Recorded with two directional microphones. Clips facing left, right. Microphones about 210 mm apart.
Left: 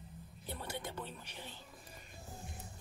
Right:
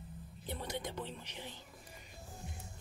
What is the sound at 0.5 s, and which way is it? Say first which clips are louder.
Speech: right 2 dB; 20° right (ahead or behind).